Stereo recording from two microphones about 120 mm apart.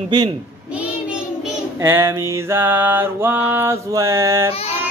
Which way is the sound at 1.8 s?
20° right (ahead or behind).